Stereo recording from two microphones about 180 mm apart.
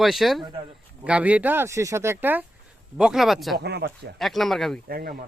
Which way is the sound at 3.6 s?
65° right (ahead or behind).